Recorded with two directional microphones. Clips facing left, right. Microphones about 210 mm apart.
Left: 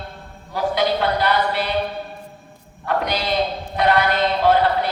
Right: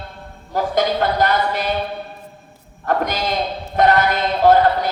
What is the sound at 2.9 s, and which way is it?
A man's voice, 45° right (ahead or behind).